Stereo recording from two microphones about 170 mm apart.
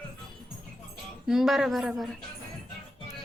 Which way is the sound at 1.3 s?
Centre (ahead or behind).